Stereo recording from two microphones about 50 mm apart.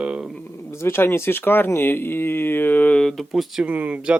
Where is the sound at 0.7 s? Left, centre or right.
Left.